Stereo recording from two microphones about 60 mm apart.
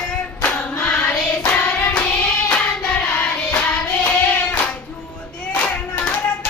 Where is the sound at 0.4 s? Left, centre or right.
Left.